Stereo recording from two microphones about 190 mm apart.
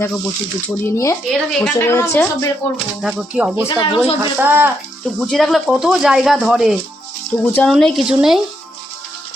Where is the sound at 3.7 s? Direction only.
25° left (ahead or behind).